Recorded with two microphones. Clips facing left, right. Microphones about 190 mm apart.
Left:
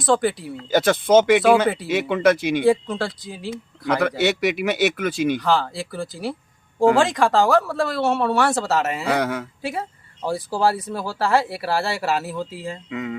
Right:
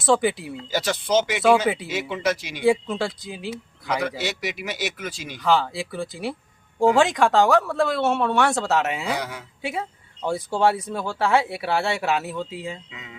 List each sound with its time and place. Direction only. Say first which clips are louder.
0.0 s speech: left 1 dB; centre (ahead or behind)
0.7 s speech: left 7 dB; 55° left (ahead or behind)
2.6 s speech: right 1 dB; centre (ahead or behind)
4.2 s speech: left 9 dB; 60° left (ahead or behind)
5.4 s speech: even; centre (ahead or behind)
9.0 s speech: left 6 dB; 60° left (ahead or behind)
10.2 s speech: even; centre (ahead or behind)
12.9 s speech: left 15 dB; 60° left (ahead or behind)